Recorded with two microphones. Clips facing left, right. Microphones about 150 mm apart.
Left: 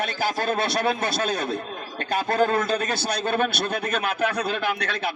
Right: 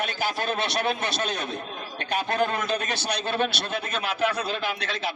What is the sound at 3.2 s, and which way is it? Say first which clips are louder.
A man's voice: left 4 dB; 50° left (ahead or behind).